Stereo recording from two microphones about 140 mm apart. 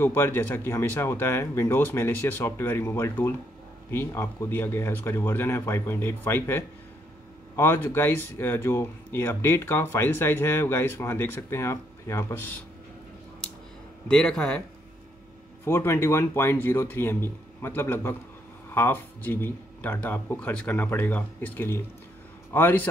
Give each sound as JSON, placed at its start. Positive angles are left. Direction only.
{"t": 0.0, "sound": "speech", "side_deg": 15}
{"t": 14.0, "sound": "speech", "side_deg": 5}
{"t": 15.6, "sound": "speech", "side_deg": 20}